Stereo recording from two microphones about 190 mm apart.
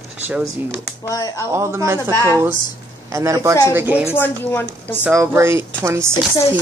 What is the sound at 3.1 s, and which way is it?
Speech, 15° right (ahead or behind).